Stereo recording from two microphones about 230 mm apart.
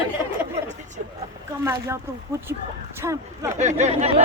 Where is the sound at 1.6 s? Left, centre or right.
Centre.